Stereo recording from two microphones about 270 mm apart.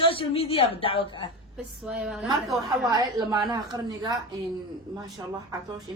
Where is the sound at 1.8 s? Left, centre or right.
Centre.